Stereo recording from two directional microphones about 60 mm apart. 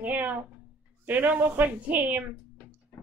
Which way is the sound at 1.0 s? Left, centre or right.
Right.